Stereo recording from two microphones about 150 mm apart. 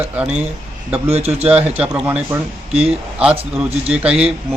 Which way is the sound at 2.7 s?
40° right (ahead or behind).